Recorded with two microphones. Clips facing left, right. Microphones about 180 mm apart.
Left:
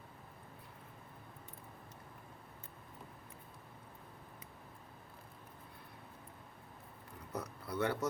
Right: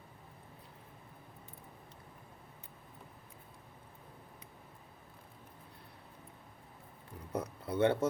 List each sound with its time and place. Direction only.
7.3 s speech: 25° right (ahead or behind)